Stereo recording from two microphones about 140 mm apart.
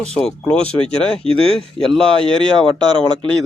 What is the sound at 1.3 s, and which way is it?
Speech, 45° right (ahead or behind).